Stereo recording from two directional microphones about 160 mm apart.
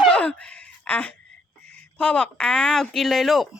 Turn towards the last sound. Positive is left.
turn(degrees=0)  # may be behind; listen again after turning